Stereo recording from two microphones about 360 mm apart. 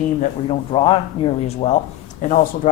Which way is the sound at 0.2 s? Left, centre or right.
Centre.